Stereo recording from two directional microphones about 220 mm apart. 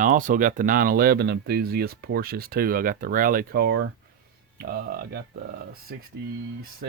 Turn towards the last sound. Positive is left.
turn(degrees=-50)  # may be behind; listen again after turning